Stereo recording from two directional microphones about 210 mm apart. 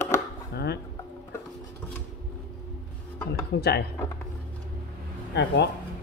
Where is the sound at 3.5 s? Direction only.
55° left (ahead or behind).